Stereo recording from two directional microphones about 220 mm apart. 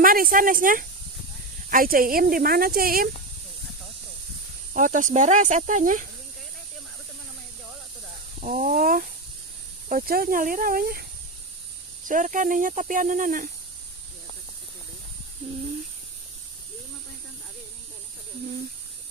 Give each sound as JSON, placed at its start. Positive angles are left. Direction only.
{"t": 0.0, "sound": "speech", "side_deg": -40}
{"t": 4.7, "sound": "speech", "side_deg": -35}
{"t": 8.4, "sound": "speech", "side_deg": -35}
{"t": 12.0, "sound": "speech", "side_deg": -35}